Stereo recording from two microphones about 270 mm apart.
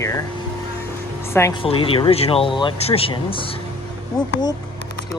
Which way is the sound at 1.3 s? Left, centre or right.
Centre.